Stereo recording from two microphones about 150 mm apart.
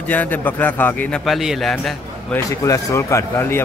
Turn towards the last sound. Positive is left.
turn(degrees=20)  # may be behind; listen again after turning